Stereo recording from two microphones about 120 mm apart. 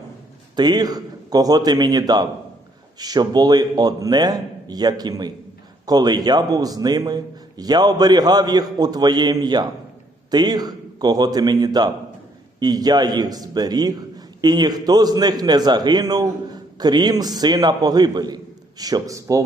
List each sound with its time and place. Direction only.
0.5 s a man's voice: 35° right (ahead or behind)